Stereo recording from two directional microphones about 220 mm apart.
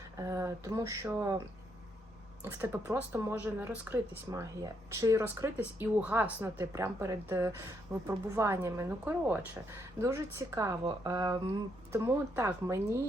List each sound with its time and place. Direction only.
0.2 s speech: 10° right (ahead or behind)
2.4 s speech: 10° right (ahead or behind)